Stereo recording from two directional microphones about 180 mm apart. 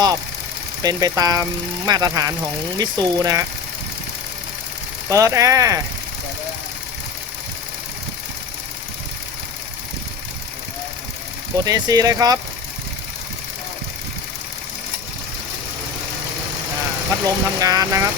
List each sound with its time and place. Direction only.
0.8 s speech: 20° right (ahead or behind)
5.0 s speech: 20° right (ahead or behind)
11.6 s speech: 20° right (ahead or behind)
17.2 s speech: 20° right (ahead or behind)